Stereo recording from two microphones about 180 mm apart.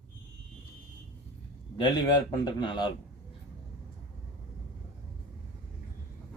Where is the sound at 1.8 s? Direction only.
25° left (ahead or behind).